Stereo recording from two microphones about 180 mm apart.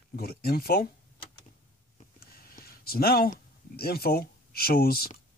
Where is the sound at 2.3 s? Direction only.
55° left (ahead or behind).